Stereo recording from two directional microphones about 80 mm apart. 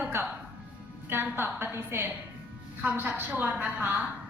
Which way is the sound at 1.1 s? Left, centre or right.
Right.